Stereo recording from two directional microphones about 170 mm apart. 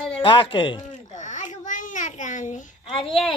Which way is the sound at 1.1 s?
45° left (ahead or behind).